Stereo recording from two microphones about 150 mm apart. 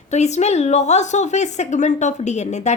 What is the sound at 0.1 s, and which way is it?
A woman's voice, 50° left (ahead or behind).